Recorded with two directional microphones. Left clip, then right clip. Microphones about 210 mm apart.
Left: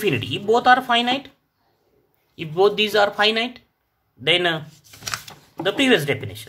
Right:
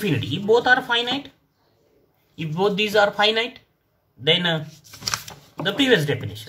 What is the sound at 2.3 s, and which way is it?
A man's voice, 35° left (ahead or behind).